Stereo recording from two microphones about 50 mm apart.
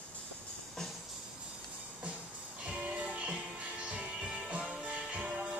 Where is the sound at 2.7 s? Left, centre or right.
Right.